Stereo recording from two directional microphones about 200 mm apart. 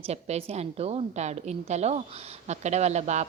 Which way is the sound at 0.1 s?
30° right (ahead or behind).